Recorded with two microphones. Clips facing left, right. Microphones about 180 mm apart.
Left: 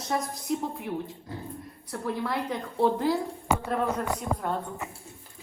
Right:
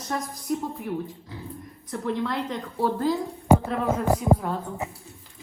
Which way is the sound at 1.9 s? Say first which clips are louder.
Right 3 dB; 5° left (ahead or behind).